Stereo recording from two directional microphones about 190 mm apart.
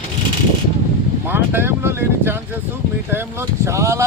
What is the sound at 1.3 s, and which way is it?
Speech, 10° right (ahead or behind).